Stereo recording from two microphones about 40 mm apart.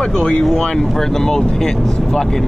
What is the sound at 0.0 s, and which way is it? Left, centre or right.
Speech, centre.